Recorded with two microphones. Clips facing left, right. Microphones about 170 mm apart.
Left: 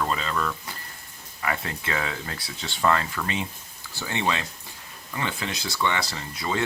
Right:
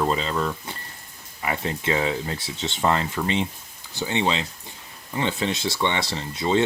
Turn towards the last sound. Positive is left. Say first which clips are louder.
# right 6 dB
turn(degrees=-25)  # may be behind; listen again after turning